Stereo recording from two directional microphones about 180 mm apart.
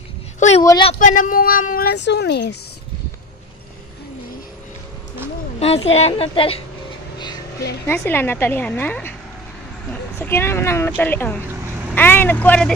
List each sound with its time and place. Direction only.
0.4 s a sound: 40° left (ahead or behind)
0.7 s speech: 25° left (ahead or behind)
0.9 s speech: 45° left (ahead or behind); by 2.5 s 70° left (ahead or behind)
5.6 s a woman's voice: 35° left (ahead or behind)
7.8 s speech: 15° left (ahead or behind)
10.1 s speech: 15° left (ahead or behind)
11.4 s vehicle: 10° right (ahead or behind)
11.9 s speech: 10° left (ahead or behind)